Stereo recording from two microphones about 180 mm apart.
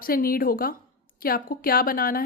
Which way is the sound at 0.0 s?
55° left (ahead or behind).